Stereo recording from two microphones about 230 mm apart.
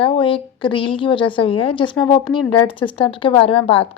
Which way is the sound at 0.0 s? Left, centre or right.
Left.